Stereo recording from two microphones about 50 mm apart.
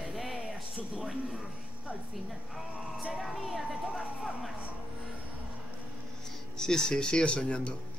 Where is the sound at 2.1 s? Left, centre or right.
Centre.